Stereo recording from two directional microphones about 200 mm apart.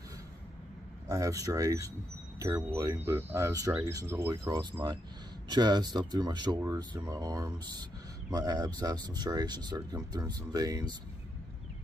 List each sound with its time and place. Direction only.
1.0 s speech: 15° right (ahead or behind)